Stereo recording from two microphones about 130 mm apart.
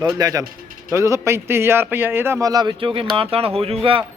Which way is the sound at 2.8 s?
45° right (ahead or behind).